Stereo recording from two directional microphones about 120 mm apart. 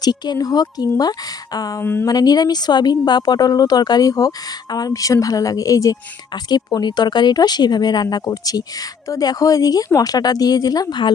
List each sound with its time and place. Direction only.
0.0 s a woman's voice: 35° left (ahead or behind)
1.8 s speech: 15° left (ahead or behind)
2.0 s a woman's voice: 35° left (ahead or behind)